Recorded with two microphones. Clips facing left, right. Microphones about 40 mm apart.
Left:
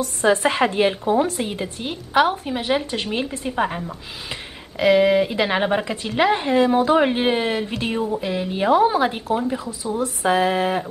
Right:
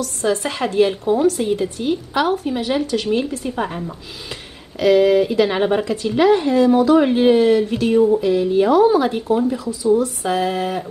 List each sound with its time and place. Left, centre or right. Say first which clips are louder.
0.0 s a woman's voice: left 2 dB; left